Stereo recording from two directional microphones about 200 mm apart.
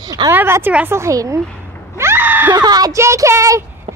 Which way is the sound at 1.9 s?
10° right (ahead or behind).